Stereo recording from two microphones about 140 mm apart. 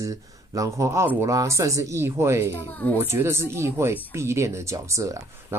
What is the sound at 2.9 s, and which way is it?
Speech, 20° right (ahead or behind).